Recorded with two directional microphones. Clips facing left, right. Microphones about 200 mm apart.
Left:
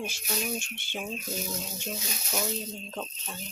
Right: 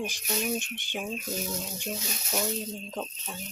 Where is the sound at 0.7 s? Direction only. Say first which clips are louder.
Right 2 dB; 15° right (ahead or behind).